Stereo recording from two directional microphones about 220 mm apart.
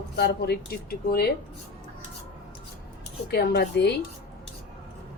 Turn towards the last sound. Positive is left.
turn(degrees=50)  # may be behind; listen again after turning